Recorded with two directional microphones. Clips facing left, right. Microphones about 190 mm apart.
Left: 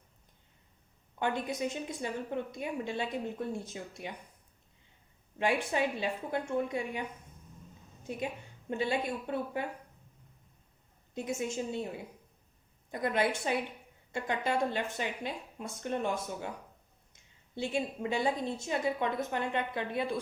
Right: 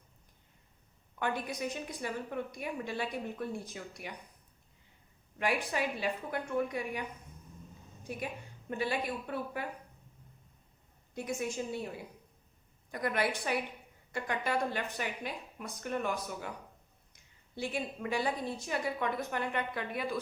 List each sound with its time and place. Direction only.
1.2 s a woman's voice: 25° left (ahead or behind)
5.4 s a woman's voice: 25° left (ahead or behind)
8.0 s a woman's voice: 25° left (ahead or behind)
11.1 s a woman's voice: 25° left (ahead or behind)